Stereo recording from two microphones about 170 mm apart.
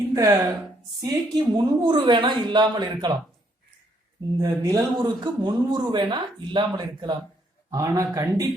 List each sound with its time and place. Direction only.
0.1 s a man's voice: 20° right (ahead or behind)
4.4 s a man's voice: 20° right (ahead or behind)